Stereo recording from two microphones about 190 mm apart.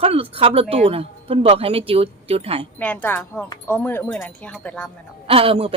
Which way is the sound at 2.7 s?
10° left (ahead or behind).